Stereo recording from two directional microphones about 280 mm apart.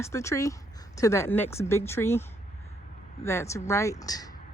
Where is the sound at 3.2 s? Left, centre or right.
Centre.